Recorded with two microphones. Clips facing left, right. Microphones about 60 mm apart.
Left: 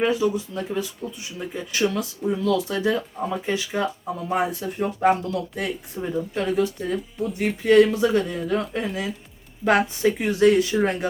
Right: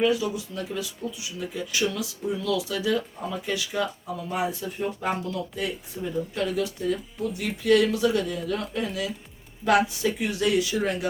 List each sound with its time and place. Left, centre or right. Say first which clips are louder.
0.0 s speech: left 2 dB; left
4.3 s speech: left 4 dB; left
6.0 s speech: left 2 dB; left